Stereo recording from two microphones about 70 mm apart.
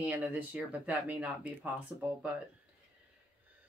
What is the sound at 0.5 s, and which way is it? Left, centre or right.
Speech, right.